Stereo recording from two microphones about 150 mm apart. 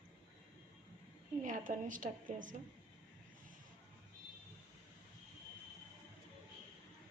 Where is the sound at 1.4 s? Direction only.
60° right (ahead or behind).